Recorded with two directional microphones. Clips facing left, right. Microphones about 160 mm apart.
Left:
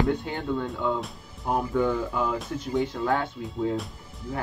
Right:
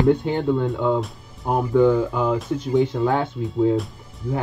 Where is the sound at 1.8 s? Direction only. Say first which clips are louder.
Right 11 dB; 15° right (ahead or behind).